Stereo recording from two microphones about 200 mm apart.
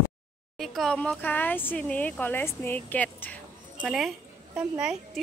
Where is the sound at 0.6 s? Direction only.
Centre (ahead or behind).